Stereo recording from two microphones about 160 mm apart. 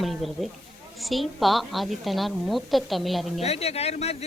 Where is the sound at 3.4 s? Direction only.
40° left (ahead or behind).